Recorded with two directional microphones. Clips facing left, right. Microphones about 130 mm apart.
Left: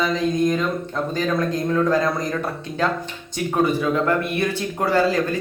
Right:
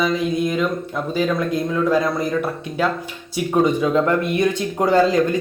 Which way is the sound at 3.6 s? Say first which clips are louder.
Right 1 dB; 20° right (ahead or behind).